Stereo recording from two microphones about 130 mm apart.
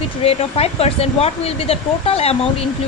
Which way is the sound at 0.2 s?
50° left (ahead or behind).